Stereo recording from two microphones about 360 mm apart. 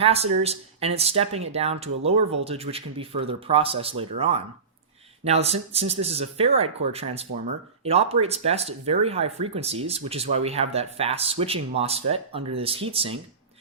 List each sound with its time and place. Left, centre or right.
0.0 s speech: centre